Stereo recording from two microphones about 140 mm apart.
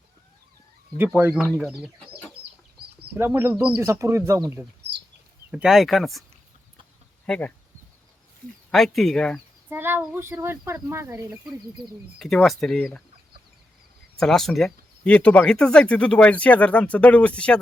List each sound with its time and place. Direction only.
0.9 s speech: 15° right (ahead or behind)
3.2 s speech: 15° right (ahead or behind)
5.5 s speech: 5° right (ahead or behind)
7.3 s speech: 10° left (ahead or behind)
8.7 s speech: centre (ahead or behind)
9.6 s speech: 15° right (ahead or behind)
11.8 s speech: centre (ahead or behind)
14.2 s speech: 5° left (ahead or behind)